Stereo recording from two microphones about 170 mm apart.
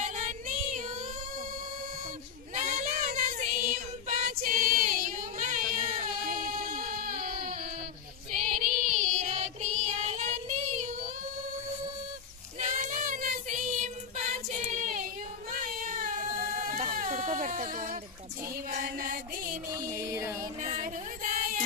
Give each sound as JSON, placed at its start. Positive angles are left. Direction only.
{"t": 0.0, "sound": "child singing", "side_deg": -45}
{"t": 2.5, "sound": "child singing", "side_deg": -50}
{"t": 12.5, "sound": "child singing", "side_deg": -45}
{"t": 15.5, "sound": "a sound", "side_deg": -50}
{"t": 18.7, "sound": "music", "side_deg": -50}
{"t": 19.7, "sound": "music", "side_deg": -15}
{"t": 20.6, "sound": "female singing", "side_deg": -50}